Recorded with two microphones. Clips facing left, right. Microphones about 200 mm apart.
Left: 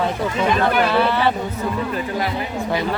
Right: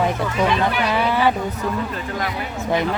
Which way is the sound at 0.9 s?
10° right (ahead or behind).